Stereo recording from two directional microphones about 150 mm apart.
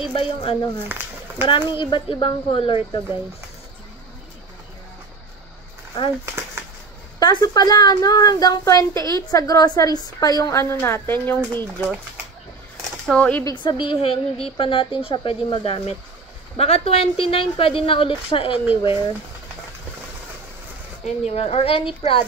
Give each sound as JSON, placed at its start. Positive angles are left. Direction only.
{"t": 0.0, "sound": "a woman's voice", "side_deg": 35}
{"t": 0.8, "sound": "a sound", "side_deg": -15}
{"t": 1.7, "sound": "a woman's voice", "side_deg": 35}
{"t": 7.2, "sound": "a woman's voice", "side_deg": 25}
{"t": 13.0, "sound": "speech", "side_deg": 5}
{"t": 13.4, "sound": "a woman's voice", "side_deg": 25}
{"t": 21.0, "sound": "a woman's voice", "side_deg": 45}